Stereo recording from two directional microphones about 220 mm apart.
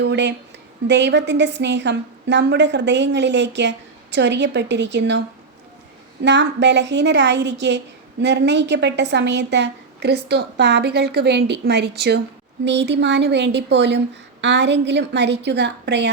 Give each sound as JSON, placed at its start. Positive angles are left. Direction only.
{"t": 0.0, "sound": "a woman's voice", "side_deg": -55}
{"t": 6.2, "sound": "a woman's voice", "side_deg": -50}